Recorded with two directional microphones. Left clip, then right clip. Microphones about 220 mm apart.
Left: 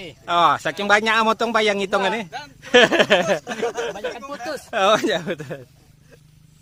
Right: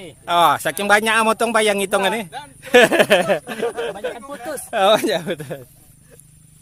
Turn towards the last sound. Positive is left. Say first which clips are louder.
# right 2 dB
turn(degrees=-5)  # may be behind; listen again after turning